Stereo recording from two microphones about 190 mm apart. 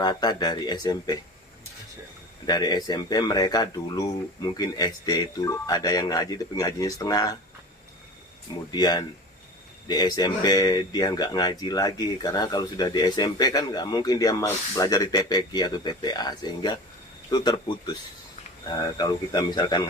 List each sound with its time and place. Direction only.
0.0 s speech: 20° left (ahead or behind)
2.5 s speech: 20° left (ahead or behind)
8.7 s speech: 20° left (ahead or behind)
18.9 s speech: 20° left (ahead or behind)